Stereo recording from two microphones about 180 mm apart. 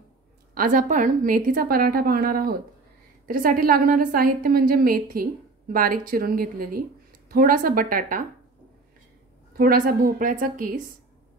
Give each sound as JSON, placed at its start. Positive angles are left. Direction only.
{"t": 0.6, "sound": "a woman's voice", "side_deg": -45}
{"t": 9.6, "sound": "a woman's voice", "side_deg": -55}